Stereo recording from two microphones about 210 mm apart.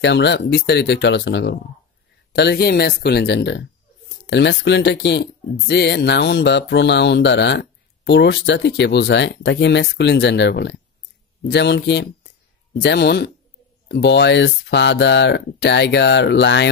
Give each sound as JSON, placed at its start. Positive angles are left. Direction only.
{"t": 0.0, "sound": "speech", "side_deg": 55}